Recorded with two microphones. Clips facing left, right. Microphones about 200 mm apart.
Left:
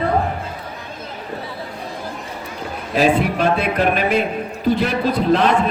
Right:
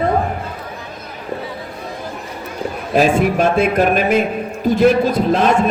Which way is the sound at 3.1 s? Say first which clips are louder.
Right 3 dB; 45° right (ahead or behind).